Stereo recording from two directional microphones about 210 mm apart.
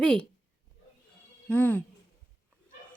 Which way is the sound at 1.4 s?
10° left (ahead or behind).